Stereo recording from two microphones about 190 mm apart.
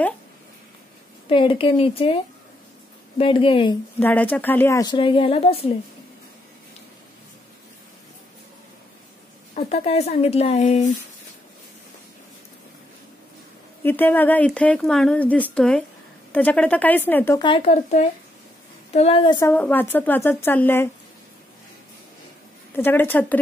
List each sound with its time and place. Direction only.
1.3 s speech: 25° left (ahead or behind)
3.2 s speech: 30° left (ahead or behind)
4.0 s speech: 10° left (ahead or behind); by 5.7 s 30° left (ahead or behind)
9.7 s speech: 35° left (ahead or behind)
13.8 s a woman's voice: 10° left (ahead or behind)
17.4 s speech: 30° left (ahead or behind)
19.5 s a woman's voice: 10° left (ahead or behind)
22.8 s a woman's voice: 10° left (ahead or behind)